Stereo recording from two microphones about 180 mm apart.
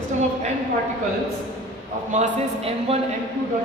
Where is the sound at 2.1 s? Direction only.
40° right (ahead or behind).